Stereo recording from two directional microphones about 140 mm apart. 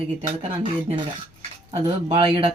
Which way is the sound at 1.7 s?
45° right (ahead or behind).